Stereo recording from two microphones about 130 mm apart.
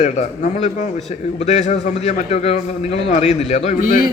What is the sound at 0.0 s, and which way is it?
A man's voice, 65° left (ahead or behind).